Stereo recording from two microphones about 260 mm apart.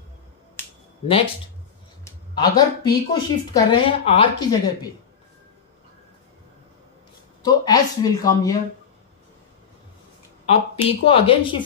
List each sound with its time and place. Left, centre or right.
1.0 s speech: left
7.4 s speech: centre
10.5 s speech: left